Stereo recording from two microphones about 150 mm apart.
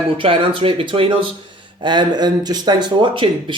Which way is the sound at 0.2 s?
35° right (ahead or behind).